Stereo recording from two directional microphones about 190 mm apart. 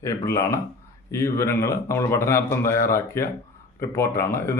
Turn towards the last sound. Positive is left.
turn(degrees=15)  # may be behind; listen again after turning